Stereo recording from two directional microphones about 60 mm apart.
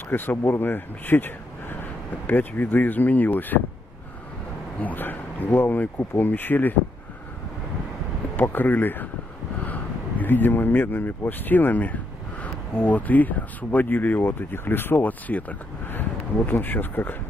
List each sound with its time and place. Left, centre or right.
0.1 s speech: left
4.8 s speech: left
8.4 s speech: left